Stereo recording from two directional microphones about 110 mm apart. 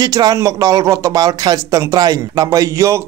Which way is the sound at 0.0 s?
35° right (ahead or behind).